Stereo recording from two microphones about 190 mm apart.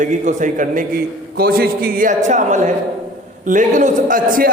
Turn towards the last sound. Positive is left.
turn(degrees=-45)  # may be behind; listen again after turning